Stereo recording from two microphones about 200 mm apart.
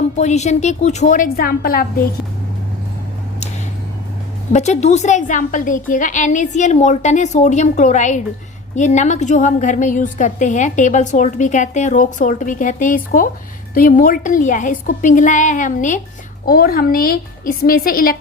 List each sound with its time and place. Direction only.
0.2 s a woman's voice: 35° left (ahead or behind)
4.5 s a woman's voice: 35° left (ahead or behind)